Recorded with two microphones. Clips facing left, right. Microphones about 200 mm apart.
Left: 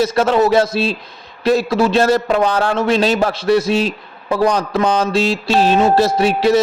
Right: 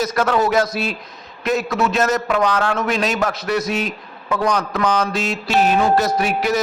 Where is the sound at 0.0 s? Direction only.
25° left (ahead or behind).